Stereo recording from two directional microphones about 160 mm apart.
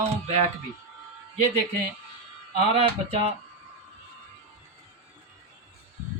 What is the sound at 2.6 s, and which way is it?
Speech, 35° right (ahead or behind).